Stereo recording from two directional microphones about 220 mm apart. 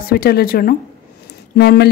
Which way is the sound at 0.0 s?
45° left (ahead or behind).